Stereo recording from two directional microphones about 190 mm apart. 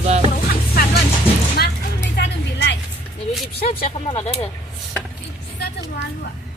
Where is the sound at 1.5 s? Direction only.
60° left (ahead or behind).